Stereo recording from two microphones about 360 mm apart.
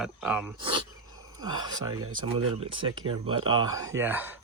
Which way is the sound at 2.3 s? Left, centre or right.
Centre.